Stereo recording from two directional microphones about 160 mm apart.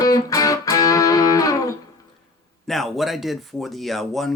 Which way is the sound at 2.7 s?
Centre (ahead or behind).